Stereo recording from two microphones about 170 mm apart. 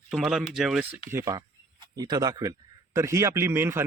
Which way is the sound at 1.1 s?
20° right (ahead or behind).